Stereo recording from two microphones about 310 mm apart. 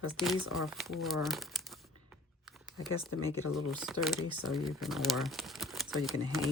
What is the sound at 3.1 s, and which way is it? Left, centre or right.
Speech, left.